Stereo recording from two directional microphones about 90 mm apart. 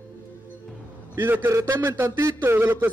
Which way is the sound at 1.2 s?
25° right (ahead or behind).